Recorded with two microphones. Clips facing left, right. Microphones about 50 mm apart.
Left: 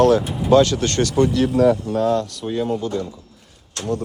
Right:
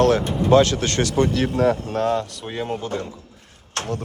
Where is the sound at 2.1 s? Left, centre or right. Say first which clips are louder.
Left 3 dB; right.